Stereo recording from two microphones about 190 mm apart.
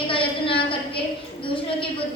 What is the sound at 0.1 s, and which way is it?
A woman's voice, 30° left (ahead or behind).